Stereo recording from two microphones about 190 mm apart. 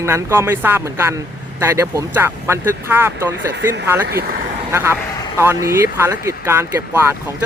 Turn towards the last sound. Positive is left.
turn(degrees=-15)  # may be behind; listen again after turning